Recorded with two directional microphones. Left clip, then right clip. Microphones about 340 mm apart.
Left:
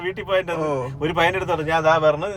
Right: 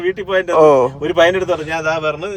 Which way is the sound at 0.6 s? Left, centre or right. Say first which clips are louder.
Right 15 dB; centre.